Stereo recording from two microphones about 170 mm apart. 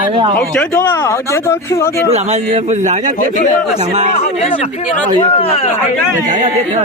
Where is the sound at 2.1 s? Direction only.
40° right (ahead or behind).